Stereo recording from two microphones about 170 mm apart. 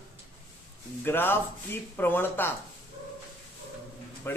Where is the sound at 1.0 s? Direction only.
10° left (ahead or behind).